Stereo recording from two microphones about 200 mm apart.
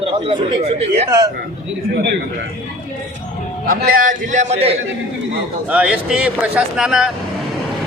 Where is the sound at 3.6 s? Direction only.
45° right (ahead or behind); by 4.8 s 30° right (ahead or behind).